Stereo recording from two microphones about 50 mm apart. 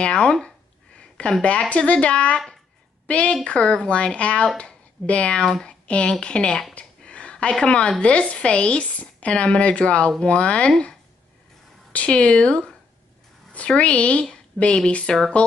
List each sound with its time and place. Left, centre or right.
0.0 s speech: centre
0.9 s a sound: centre
1.7 s a woman's voice: left
5.4 s speech: centre
6.7 s a sound: left
8.0 s speech: left
11.9 s speech: left